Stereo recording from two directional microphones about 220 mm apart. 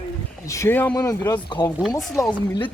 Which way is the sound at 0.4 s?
15° left (ahead or behind).